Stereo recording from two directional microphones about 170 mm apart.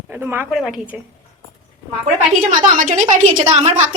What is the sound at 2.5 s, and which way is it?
A woman's voice, 50° right (ahead or behind).